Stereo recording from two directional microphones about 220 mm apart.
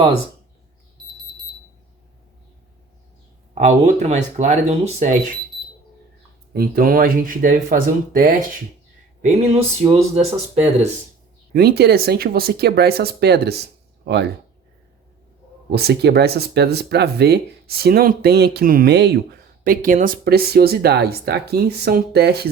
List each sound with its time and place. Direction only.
3.5 s speech: 30° right (ahead or behind)
6.5 s speech: 40° right (ahead or behind)
9.2 s a sound: 30° right (ahead or behind)
11.5 s speech: 45° right (ahead or behind)
15.7 s speech: 45° right (ahead or behind)